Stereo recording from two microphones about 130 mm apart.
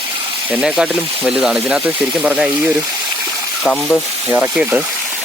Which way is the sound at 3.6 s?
10° left (ahead or behind).